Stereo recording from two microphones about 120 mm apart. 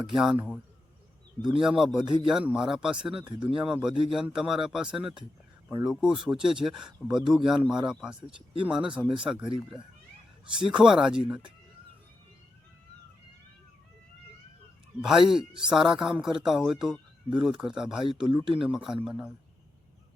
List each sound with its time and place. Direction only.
0.0 s speech: 5° right (ahead or behind)
1.5 s speech: 5° right (ahead or behind)
10.7 s speech: 5° right (ahead or behind)
15.0 s speech: 5° right (ahead or behind)
18.3 s speech: 35° right (ahead or behind)
18.6 s speech: 5° right (ahead or behind)